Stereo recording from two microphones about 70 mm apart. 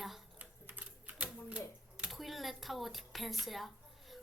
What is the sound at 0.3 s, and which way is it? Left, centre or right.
Typing, right.